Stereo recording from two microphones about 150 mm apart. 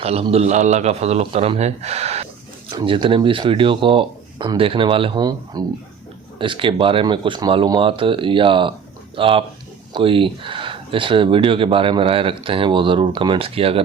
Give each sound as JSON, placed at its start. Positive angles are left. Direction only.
{"t": 0.0, "sound": "a man's voice", "side_deg": -40}